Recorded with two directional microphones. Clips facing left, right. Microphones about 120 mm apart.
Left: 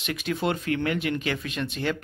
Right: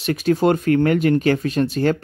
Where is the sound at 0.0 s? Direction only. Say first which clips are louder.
Right 10 dB; 40° right (ahead or behind).